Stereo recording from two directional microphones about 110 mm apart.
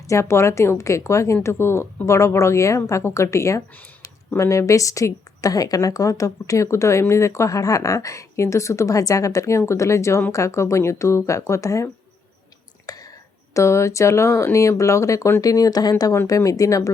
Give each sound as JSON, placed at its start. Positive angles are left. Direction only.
{"t": 0.1, "sound": "a woman's voice", "side_deg": 25}
{"t": 12.9, "sound": "whispering", "side_deg": 35}
{"t": 13.5, "sound": "a woman's voice", "side_deg": 25}